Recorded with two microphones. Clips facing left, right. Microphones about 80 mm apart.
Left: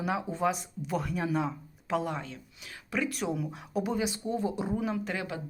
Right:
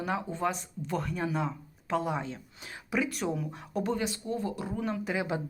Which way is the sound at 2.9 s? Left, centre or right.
Centre.